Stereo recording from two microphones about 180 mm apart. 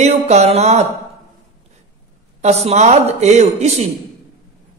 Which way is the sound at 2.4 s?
40° right (ahead or behind).